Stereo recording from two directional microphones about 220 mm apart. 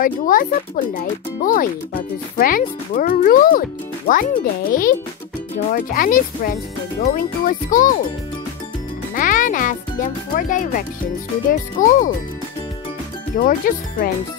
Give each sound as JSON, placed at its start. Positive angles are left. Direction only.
{"t": 0.0, "sound": "speech", "side_deg": 40}
{"t": 9.1, "sound": "a child's voice", "side_deg": 35}
{"t": 13.4, "sound": "speech", "side_deg": 40}